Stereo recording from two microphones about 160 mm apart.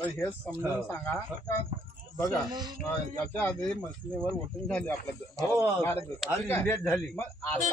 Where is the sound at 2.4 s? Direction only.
25° right (ahead or behind).